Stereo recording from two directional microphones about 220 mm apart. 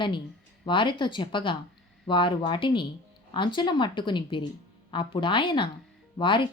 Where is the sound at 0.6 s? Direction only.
20° left (ahead or behind).